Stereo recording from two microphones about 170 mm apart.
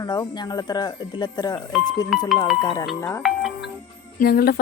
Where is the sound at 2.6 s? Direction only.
25° left (ahead or behind).